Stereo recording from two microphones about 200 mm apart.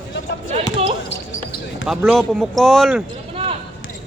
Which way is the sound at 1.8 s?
5° right (ahead or behind).